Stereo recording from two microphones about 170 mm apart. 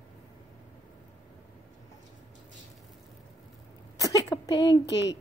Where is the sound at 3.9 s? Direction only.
20° left (ahead or behind).